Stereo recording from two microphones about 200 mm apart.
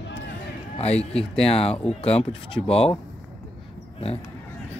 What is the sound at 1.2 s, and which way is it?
Speech, 30° left (ahead or behind).